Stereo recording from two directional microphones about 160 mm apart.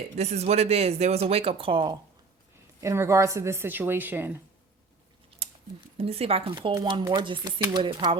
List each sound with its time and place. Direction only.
0.2 s speech: 45° right (ahead or behind)
2.8 s speech: 20° right (ahead or behind)
6.0 s speech: 40° right (ahead or behind)